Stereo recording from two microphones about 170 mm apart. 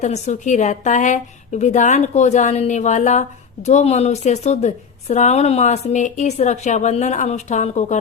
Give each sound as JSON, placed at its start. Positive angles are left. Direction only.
{"t": 0.0, "sound": "a woman's voice", "side_deg": 45}